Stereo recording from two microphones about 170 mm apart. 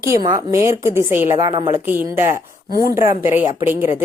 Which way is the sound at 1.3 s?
25° right (ahead or behind).